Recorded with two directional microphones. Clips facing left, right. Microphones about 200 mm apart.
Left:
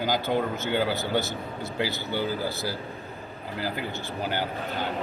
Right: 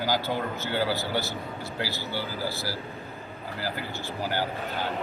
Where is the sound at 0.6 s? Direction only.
20° left (ahead or behind).